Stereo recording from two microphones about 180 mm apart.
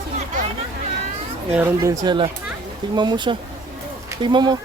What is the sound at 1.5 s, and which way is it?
Speech, 15° right (ahead or behind).